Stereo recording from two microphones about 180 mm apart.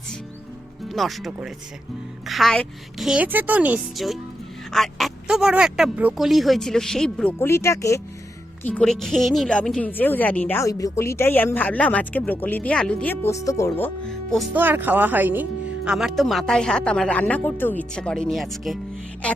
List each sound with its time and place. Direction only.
0.9 s speech: centre (ahead or behind)
7.3 s a woman's voice: 15° left (ahead or behind)
8.6 s a woman's voice: 5° left (ahead or behind)
14.5 s speech: 10° right (ahead or behind)
19.2 s music: 5° left (ahead or behind)